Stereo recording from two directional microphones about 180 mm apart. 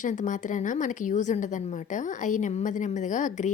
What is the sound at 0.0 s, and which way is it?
A woman's voice, 45° left (ahead or behind).